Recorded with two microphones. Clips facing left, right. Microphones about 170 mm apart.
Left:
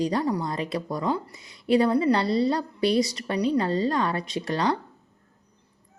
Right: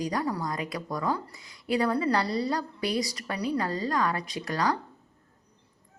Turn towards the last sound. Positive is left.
turn(degrees=30)  # may be behind; listen again after turning